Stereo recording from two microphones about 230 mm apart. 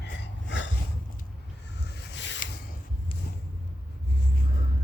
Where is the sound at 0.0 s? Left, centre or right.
Left.